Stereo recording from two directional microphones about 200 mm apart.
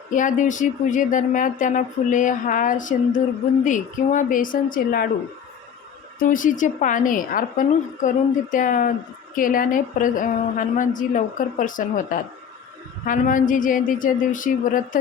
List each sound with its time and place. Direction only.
0.1 s speech: 40° left (ahead or behind)
6.1 s speech: 40° left (ahead or behind)